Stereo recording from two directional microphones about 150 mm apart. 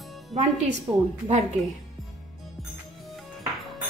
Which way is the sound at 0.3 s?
50° right (ahead or behind).